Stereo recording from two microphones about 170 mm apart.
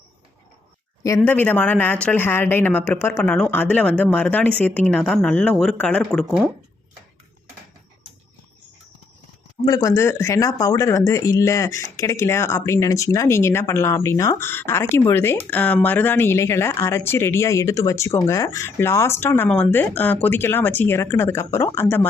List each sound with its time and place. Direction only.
1.0 s speech: 15° left (ahead or behind)
9.6 s speech: 20° left (ahead or behind)